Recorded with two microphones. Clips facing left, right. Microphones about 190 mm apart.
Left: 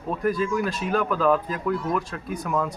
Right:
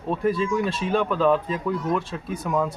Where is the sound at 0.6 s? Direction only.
30° right (ahead or behind).